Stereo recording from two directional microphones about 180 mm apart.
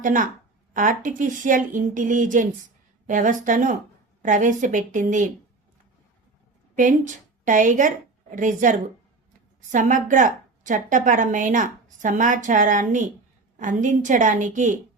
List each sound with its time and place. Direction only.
0.0 s a woman's voice: 45° right (ahead or behind)
6.7 s a woman's voice: 45° right (ahead or behind)